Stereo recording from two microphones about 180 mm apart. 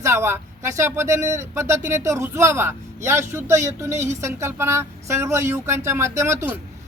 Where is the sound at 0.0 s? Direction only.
15° right (ahead or behind).